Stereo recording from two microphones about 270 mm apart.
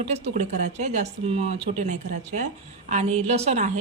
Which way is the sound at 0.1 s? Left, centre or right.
Right.